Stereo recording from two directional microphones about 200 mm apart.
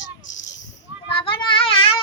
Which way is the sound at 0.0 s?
40° left (ahead or behind).